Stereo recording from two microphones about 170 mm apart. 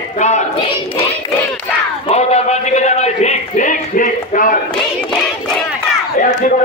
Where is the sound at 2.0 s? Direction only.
40° left (ahead or behind).